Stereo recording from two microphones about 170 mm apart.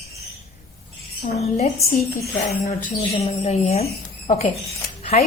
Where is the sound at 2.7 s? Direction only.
40° left (ahead or behind).